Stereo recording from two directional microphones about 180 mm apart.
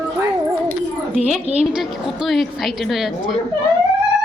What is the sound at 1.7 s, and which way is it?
A woman's voice, 5° right (ahead or behind).